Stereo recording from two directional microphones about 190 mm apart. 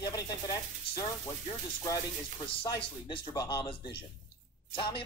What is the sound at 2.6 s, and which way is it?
Speech, 20° left (ahead or behind).